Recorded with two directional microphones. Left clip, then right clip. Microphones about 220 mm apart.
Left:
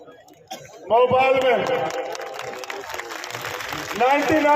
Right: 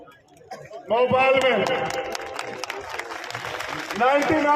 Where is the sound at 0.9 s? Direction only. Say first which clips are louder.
Left 2 dB; 25° left (ahead or behind).